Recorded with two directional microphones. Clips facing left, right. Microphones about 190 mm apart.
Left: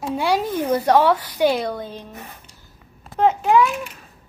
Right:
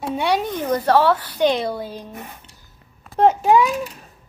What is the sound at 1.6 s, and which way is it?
Speech, 5° right (ahead or behind).